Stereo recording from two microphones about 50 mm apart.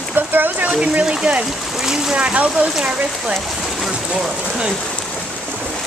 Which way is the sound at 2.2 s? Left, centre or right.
Right.